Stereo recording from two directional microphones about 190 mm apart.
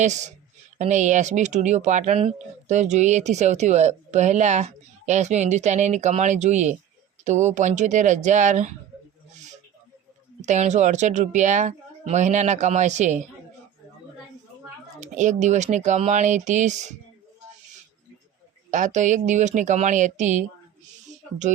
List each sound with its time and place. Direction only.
0.0 s speech: 40° right (ahead or behind)
10.4 s speech: 40° right (ahead or behind)
15.0 s speech: 40° right (ahead or behind)
18.7 s speech: 40° right (ahead or behind)